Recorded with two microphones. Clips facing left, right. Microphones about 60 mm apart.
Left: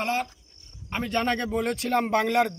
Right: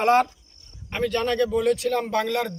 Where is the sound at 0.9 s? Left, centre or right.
Centre.